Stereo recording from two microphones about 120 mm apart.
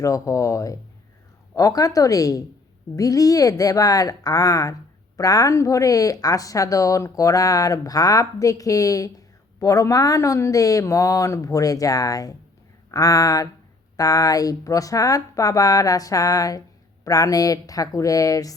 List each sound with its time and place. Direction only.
0.0 s speech: 25° left (ahead or behind)